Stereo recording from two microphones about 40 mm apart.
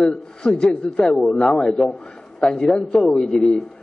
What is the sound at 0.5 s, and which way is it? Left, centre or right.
A man's voice, left.